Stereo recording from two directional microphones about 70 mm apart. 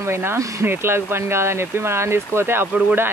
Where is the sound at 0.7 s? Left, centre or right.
Right.